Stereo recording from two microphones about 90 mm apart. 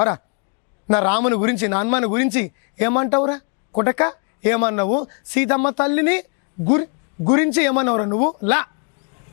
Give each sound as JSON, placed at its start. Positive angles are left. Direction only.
{"t": 0.9, "sound": "speech", "side_deg": 15}
{"t": 7.3, "sound": "speech", "side_deg": 15}